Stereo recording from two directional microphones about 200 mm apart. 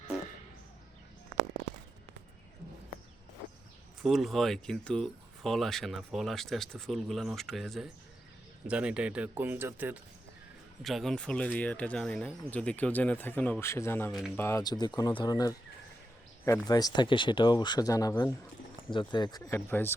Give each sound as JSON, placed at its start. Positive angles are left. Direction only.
{"t": 4.0, "sound": "speech", "side_deg": 0}